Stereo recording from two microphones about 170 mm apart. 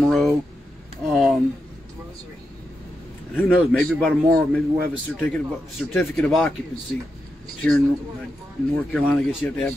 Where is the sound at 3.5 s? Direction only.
Centre (ahead or behind).